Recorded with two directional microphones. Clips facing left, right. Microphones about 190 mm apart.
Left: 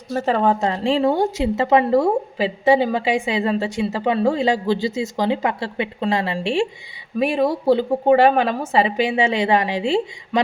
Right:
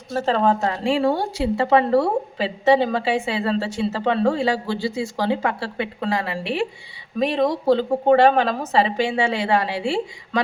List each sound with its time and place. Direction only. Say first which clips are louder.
0.3 s a woman's voice: left 1 dB; 15° left (ahead or behind)
7.2 s a woman's voice: left 1 dB; 10° left (ahead or behind)